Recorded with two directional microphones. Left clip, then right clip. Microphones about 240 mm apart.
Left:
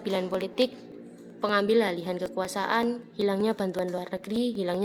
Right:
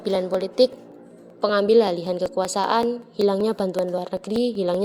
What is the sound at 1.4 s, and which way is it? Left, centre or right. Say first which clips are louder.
A woman's voice: right 6 dB; centre.